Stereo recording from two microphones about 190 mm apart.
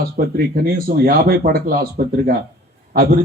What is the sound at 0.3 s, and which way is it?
A man's voice, 55° right (ahead or behind).